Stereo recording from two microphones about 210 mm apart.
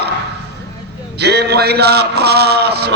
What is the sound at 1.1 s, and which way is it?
A man's voice, 50° right (ahead or behind).